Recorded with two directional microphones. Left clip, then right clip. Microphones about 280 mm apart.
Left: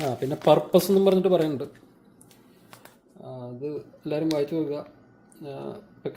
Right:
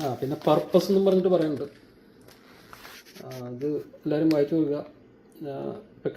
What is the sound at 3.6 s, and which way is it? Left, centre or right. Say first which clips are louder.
Speech: right 4 dB; centre.